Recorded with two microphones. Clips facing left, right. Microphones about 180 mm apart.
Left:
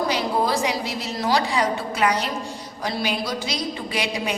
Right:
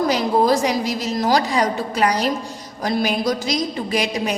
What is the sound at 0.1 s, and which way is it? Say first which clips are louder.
A woman's voice: right 5 dB; 45° right (ahead or behind).